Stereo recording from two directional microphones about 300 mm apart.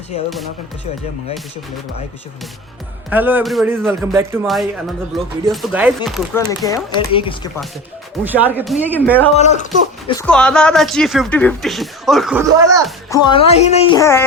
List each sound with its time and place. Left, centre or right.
3.1 s speech: centre
6.7 s a woman's voice: centre
8.2 s speech: centre
9.3 s speech: left
10.1 s speech: centre
13.1 s a woman's voice: centre
14.0 s a woman's voice: centre